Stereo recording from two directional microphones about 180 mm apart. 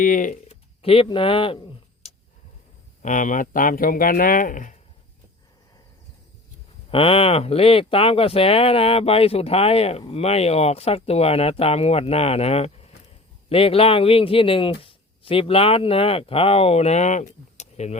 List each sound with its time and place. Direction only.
0.0 s speech: 50° left (ahead or behind)
0.8 s speech: 30° left (ahead or behind)
3.0 s speech: 45° left (ahead or behind)
6.9 s a man's voice: 30° left (ahead or behind)